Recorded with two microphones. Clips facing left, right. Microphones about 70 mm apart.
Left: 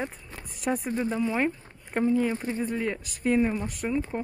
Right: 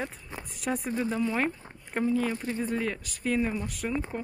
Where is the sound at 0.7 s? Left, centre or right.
Centre.